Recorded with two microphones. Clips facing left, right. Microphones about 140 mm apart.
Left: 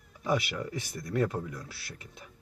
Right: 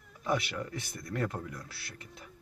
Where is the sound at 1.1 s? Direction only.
5° left (ahead or behind).